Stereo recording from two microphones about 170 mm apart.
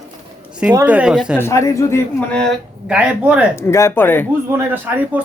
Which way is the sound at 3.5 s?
15° left (ahead or behind).